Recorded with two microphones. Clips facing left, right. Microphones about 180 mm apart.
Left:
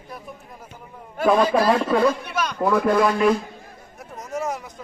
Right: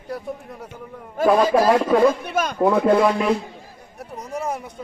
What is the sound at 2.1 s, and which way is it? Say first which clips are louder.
Speech: right 3 dB; 50° right (ahead or behind).